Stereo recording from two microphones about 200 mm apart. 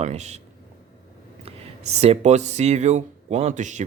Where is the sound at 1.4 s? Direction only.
30° right (ahead or behind).